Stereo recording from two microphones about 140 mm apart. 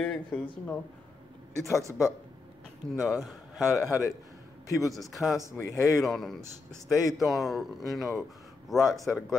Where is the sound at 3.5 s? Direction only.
25° left (ahead or behind).